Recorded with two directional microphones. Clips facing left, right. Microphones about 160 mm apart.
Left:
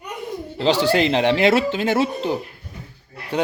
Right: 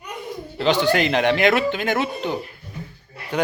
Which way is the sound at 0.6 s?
35° left (ahead or behind).